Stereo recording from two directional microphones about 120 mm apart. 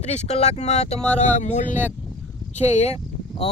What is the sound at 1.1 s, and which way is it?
Speech, 85° left.